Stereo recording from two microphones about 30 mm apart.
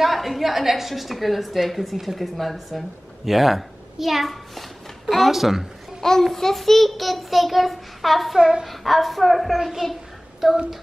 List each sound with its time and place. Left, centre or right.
0.0 s a woman's voice: centre
2.1 s a woman's voice: centre
6.3 s a woman's voice: centre
8.4 s a child's voice: right
8.6 s a woman's voice: centre